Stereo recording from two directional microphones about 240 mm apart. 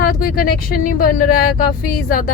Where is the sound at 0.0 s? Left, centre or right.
Left.